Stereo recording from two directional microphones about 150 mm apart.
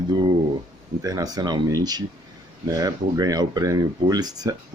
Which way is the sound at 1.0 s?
25° right (ahead or behind).